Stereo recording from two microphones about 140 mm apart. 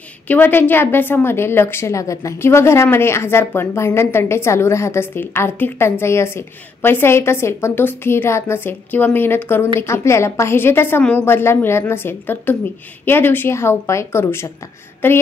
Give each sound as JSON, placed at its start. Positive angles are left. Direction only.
{"t": 0.3, "sound": "a woman's voice", "side_deg": 15}